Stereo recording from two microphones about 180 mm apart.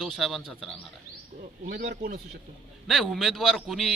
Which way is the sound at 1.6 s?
65° right (ahead or behind).